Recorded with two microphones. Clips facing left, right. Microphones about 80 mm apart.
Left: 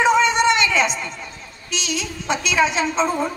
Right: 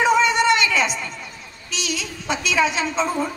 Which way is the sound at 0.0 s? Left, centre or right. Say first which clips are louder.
Left 1 dB; left.